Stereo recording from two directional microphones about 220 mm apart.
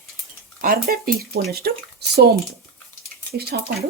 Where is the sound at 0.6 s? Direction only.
40° right (ahead or behind).